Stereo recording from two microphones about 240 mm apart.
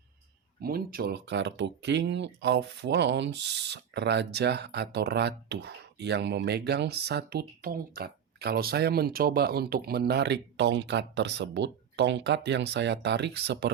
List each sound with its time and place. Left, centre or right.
0.6 s speech: right